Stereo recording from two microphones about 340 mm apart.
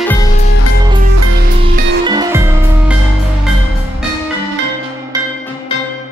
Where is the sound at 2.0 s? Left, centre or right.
Centre.